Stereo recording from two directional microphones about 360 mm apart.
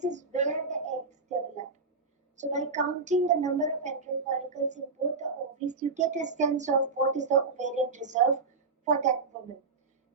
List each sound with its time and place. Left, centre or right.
0.0 s child singing: centre
2.3 s a woman's voice: centre